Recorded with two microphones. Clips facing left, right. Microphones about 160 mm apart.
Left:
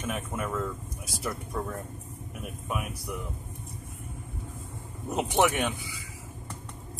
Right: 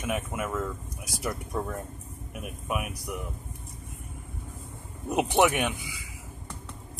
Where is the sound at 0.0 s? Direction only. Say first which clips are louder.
Right 2 dB; 10° right (ahead or behind).